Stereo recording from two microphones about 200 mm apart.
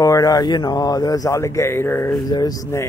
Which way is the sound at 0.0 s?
20° left (ahead or behind).